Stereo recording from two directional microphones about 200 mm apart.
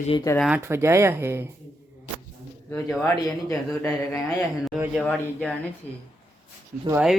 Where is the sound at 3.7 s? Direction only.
10° left (ahead or behind).